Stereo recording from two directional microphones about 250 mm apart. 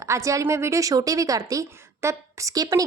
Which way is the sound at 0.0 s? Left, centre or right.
Centre.